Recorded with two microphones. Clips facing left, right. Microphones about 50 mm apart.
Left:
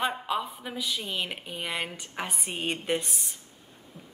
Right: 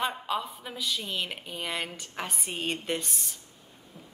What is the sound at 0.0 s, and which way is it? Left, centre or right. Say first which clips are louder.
A woman's voice: left 1 dB; centre.